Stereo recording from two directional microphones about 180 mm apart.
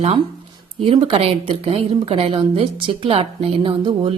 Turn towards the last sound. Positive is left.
turn(degrees=-25)  # may be behind; listen again after turning